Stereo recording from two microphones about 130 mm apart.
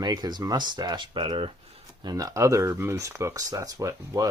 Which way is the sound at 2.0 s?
25° right (ahead or behind).